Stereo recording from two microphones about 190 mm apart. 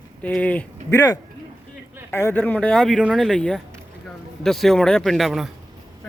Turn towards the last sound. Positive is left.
turn(degrees=0)  # may be behind; listen again after turning